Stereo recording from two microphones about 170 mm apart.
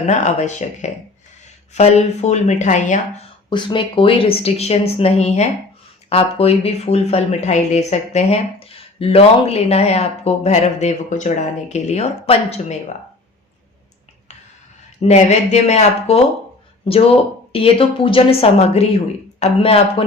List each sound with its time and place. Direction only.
0.1 s speech: 45° left (ahead or behind)
3.5 s speech: 30° left (ahead or behind)
15.0 s speech: 40° left (ahead or behind)
17.5 s speech: 35° left (ahead or behind)